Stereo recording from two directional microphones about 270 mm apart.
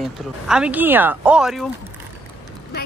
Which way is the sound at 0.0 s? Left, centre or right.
Centre.